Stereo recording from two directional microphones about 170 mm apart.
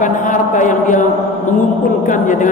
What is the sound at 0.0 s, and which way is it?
Speech, 50° left (ahead or behind).